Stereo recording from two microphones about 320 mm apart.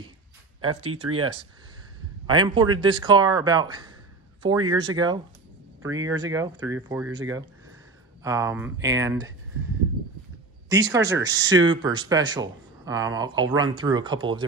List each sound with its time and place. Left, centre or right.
0.6 s speech: centre
2.2 s speech: centre
10.7 s speech: centre